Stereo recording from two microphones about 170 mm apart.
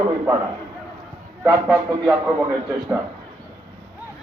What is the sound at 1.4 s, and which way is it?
Speech, 5° right (ahead or behind).